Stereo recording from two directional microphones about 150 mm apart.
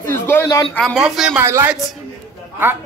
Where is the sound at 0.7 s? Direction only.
5° left (ahead or behind).